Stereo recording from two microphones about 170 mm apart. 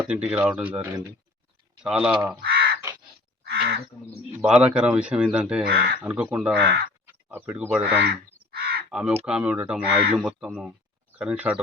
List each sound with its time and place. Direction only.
0.0 s a man's voice: 10° right (ahead or behind)
2.4 s crow: 65° right (ahead or behind)
3.4 s frog: 70° right (ahead or behind)
4.4 s a man's voice: 5° right (ahead or behind)
5.6 s speech: 65° right (ahead or behind)
6.0 s speech: 10° right (ahead or behind)
6.6 s speech: 75° right (ahead or behind)
7.0 s speech: 10° right (ahead or behind)
8.4 s crow: 65° right (ahead or behind)
8.9 s speech: 5° right (ahead or behind)